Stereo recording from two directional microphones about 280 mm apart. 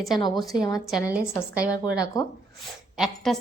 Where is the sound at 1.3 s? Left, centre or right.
Centre.